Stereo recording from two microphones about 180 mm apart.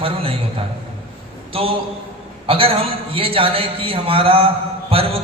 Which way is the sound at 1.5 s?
30° right (ahead or behind).